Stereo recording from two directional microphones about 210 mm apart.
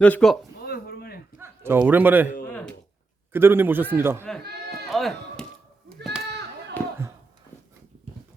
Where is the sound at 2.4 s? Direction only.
5° left (ahead or behind).